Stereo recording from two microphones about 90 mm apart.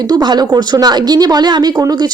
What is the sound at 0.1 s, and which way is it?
A woman's voice, 50° right (ahead or behind).